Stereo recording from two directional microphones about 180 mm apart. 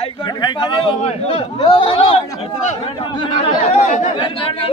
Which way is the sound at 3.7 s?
45° left (ahead or behind).